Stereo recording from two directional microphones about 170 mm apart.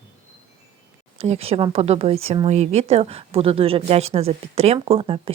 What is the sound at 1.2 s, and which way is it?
Speech, 35° right (ahead or behind).